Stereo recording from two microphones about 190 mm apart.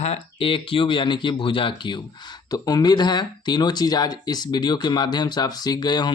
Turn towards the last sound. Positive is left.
turn(degrees=20)  # may be behind; listen again after turning